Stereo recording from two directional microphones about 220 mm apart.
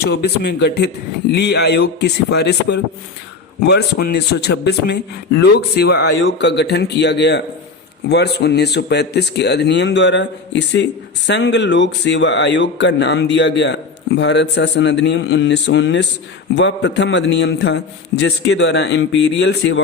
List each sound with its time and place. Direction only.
0.0 s a man's voice: 50° left (ahead or behind)